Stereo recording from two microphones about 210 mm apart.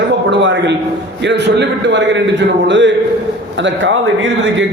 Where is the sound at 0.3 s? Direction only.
55° right (ahead or behind).